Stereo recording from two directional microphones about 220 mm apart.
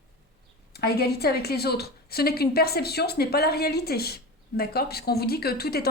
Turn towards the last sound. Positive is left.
turn(degrees=45)  # may be behind; listen again after turning